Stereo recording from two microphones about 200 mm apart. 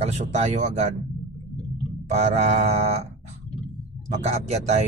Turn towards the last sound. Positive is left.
turn(degrees=-35)  # may be behind; listen again after turning